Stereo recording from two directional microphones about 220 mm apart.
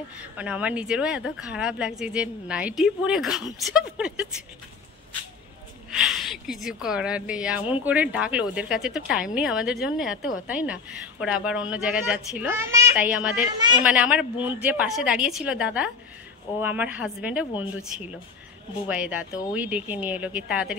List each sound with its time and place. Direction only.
0.2 s a woman's voice: 5° right (ahead or behind)
5.9 s a woman's voice: 5° right (ahead or behind)
18.9 s speech: 5° right (ahead or behind)